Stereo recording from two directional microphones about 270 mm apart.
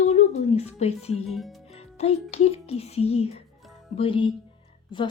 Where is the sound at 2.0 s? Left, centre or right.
Left.